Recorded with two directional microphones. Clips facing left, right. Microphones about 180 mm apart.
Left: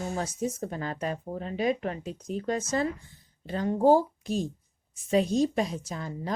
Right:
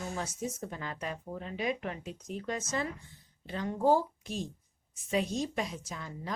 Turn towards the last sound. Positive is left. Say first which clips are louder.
# left 6 dB
turn(degrees=35)  # may be behind; listen again after turning